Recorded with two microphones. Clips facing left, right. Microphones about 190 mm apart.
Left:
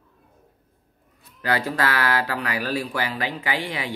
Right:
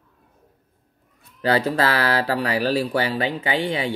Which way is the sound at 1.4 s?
30° right (ahead or behind).